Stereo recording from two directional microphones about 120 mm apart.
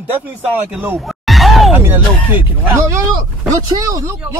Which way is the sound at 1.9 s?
15° right (ahead or behind).